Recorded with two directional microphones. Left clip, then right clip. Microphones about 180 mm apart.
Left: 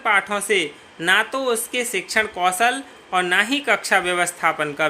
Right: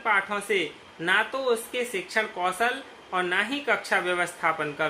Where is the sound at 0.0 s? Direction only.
55° left (ahead or behind).